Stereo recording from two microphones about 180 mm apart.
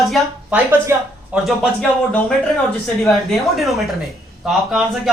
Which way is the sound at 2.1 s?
5° left (ahead or behind).